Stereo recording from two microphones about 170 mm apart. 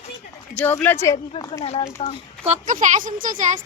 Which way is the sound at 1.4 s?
30° left (ahead or behind).